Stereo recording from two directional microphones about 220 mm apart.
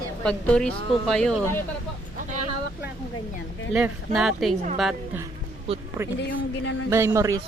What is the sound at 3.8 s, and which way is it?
Speech, centre (ahead or behind).